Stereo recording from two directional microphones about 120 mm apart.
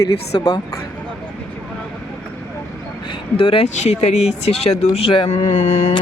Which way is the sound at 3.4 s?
55° left (ahead or behind).